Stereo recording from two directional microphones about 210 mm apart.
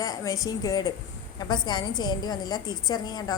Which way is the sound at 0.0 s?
15° left (ahead or behind).